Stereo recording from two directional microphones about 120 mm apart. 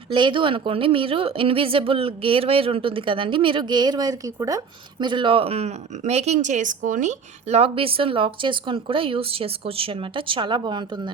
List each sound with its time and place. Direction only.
0.1 s a woman's voice: 45° right (ahead or behind)